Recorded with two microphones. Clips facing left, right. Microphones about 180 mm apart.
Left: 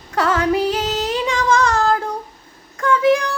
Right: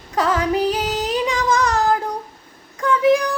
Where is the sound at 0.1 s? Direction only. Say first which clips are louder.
Left 1 dB; 15° right (ahead or behind).